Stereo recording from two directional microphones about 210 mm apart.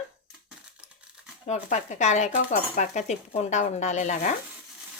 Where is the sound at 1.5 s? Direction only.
35° left (ahead or behind).